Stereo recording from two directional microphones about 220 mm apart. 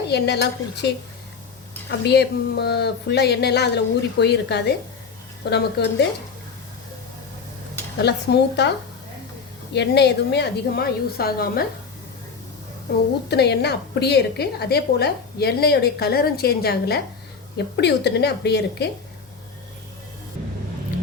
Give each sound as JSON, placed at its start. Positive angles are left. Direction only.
{"t": 0.1, "sound": "a woman's voice", "side_deg": 50}
{"t": 8.0, "sound": "a woman's voice", "side_deg": 50}
{"t": 9.7, "sound": "a woman's voice", "side_deg": 50}
{"t": 13.2, "sound": "a woman's voice", "side_deg": 50}